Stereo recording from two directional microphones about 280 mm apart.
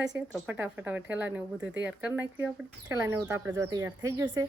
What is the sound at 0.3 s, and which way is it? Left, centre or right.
Speech, centre.